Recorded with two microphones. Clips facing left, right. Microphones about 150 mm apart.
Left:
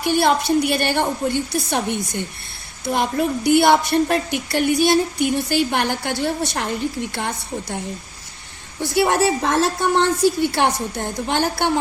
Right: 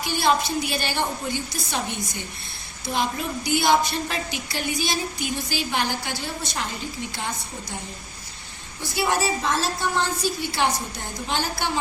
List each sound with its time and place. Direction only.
0.0 s a woman's voice: 60° left (ahead or behind)
8.9 s a woman's voice: 60° left (ahead or behind)